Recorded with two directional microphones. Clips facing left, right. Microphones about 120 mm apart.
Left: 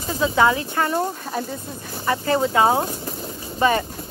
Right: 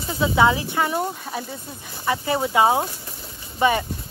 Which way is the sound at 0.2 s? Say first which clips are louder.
Even; 15° right (ahead or behind).